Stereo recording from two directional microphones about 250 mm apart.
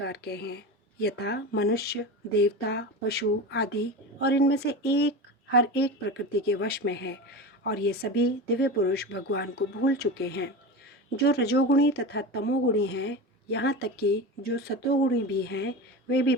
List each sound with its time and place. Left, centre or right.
0.0 s speech: left